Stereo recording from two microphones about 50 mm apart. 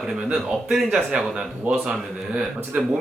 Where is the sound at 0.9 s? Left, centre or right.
Right.